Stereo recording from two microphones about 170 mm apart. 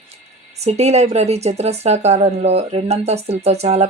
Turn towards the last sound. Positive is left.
turn(degrees=-40)  # may be behind; listen again after turning